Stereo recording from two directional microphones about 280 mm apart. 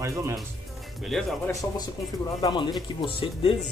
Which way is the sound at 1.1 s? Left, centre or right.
Centre.